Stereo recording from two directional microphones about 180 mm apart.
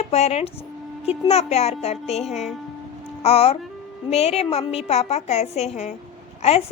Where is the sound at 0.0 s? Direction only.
35° left (ahead or behind).